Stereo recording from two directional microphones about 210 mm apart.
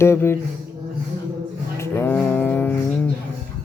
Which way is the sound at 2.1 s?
10° left (ahead or behind).